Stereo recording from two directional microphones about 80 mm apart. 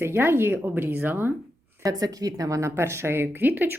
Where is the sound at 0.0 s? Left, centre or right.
Right.